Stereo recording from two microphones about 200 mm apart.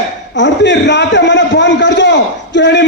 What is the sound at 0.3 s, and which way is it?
A man's voice, 60° left (ahead or behind).